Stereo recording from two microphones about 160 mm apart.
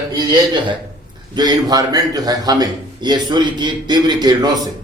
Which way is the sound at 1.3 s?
25° right (ahead or behind).